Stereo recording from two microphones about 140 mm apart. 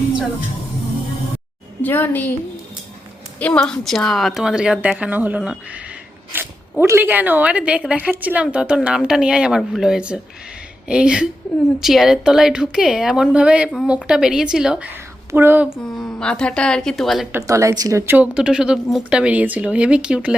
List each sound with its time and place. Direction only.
1.8 s a woman's voice: 15° left (ahead or behind)
3.3 s a woman's voice: 10° left (ahead or behind); by 15.7 s 15° right (ahead or behind)
15.8 s a woman's voice: 5° left (ahead or behind)
17.3 s speech: 20° right (ahead or behind)